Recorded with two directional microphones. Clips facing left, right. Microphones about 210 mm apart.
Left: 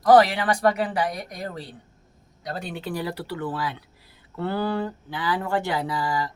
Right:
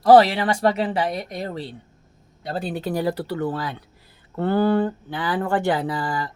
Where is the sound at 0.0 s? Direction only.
30° right (ahead or behind).